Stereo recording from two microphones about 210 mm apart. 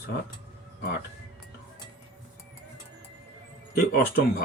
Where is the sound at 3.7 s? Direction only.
45° left (ahead or behind).